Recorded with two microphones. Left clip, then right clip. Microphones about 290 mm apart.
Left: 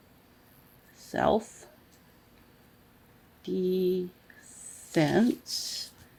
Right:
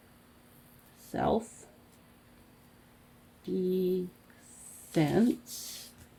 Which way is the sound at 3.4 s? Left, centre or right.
Left.